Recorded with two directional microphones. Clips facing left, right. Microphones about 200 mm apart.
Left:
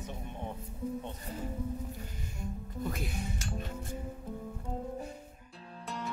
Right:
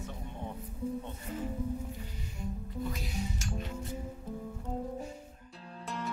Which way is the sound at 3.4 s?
45° left (ahead or behind).